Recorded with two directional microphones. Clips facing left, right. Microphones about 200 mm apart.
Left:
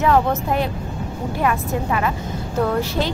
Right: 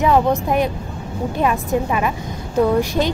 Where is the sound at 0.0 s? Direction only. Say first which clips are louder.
Right 2 dB; 15° right (ahead or behind).